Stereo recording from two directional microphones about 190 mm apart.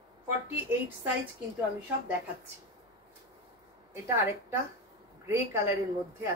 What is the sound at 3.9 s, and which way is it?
A woman's voice, 15° right (ahead or behind).